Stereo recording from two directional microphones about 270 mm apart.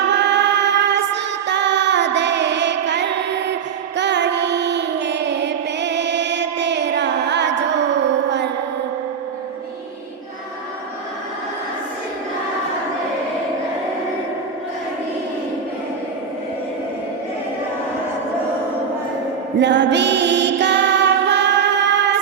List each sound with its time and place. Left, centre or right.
0.1 s music: right
19.5 s music: right